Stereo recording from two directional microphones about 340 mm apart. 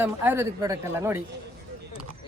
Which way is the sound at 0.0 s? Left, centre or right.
Centre.